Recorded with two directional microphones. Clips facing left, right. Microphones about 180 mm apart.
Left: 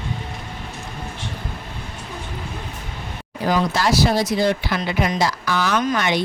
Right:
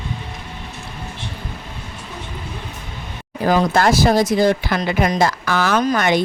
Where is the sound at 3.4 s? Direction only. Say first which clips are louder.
Right 4 dB; 50° right (ahead or behind).